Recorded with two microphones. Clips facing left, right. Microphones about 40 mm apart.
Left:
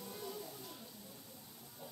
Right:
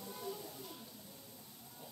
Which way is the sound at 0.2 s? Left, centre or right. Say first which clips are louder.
Right 3 dB; centre.